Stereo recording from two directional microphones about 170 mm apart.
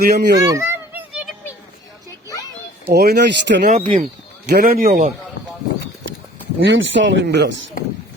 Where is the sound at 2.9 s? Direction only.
70° right (ahead or behind); by 3.7 s 90° right.